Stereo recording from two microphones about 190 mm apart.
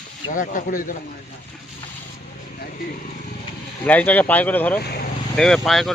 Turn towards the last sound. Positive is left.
turn(degrees=0)  # may be behind; listen again after turning